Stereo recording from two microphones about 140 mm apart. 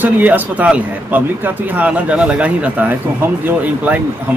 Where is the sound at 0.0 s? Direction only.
10° right (ahead or behind).